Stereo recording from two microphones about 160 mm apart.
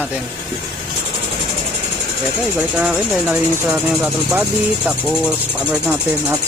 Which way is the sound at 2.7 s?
10° right (ahead or behind).